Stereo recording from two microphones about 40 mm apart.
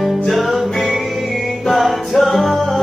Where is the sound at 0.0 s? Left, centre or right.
Centre.